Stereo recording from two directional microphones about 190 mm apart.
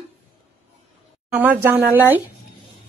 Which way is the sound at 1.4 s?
10° right (ahead or behind).